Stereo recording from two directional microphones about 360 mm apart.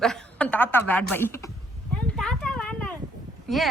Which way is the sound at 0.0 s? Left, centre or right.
Centre.